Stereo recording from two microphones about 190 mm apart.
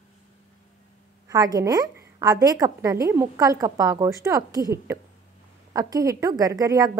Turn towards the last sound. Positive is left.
turn(degrees=-20)  # may be behind; listen again after turning